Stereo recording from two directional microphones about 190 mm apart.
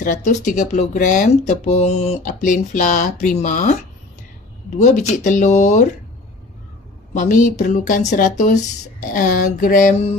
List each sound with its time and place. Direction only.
0.0 s speech: 40° left (ahead or behind)
4.7 s speech: 40° left (ahead or behind)
7.2 s speech: 40° left (ahead or behind)